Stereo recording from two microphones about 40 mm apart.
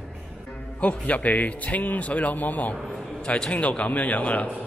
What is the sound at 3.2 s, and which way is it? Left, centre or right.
Speech, left.